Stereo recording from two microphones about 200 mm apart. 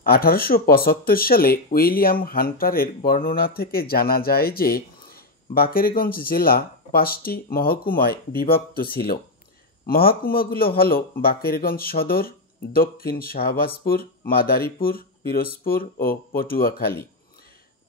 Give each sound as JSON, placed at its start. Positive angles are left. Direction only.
{"t": 0.0, "sound": "speech", "side_deg": 50}
{"t": 9.8, "sound": "speech", "side_deg": 50}